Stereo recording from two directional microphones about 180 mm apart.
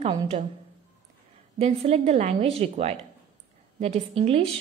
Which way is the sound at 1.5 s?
35° right (ahead or behind).